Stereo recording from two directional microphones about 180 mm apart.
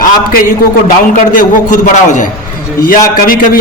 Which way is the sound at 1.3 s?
45° left (ahead or behind).